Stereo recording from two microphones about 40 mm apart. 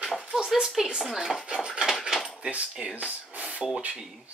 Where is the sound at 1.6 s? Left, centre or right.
Centre.